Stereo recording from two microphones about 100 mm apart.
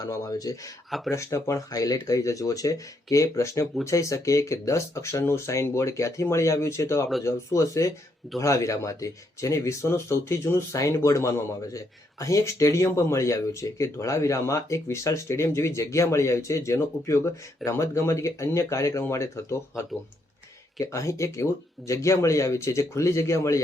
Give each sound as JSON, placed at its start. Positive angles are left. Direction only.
{"t": 0.0, "sound": "speech", "side_deg": 40}
{"t": 0.9, "sound": "speech", "side_deg": 0}
{"t": 1.1, "sound": "speech", "side_deg": 30}